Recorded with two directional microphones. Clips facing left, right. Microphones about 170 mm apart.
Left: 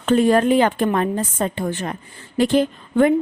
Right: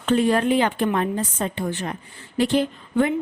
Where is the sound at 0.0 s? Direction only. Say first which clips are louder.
Left 4 dB; 45° left (ahead or behind).